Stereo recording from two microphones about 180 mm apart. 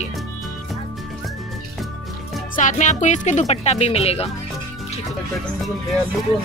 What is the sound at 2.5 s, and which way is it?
Speech, 45° left (ahead or behind).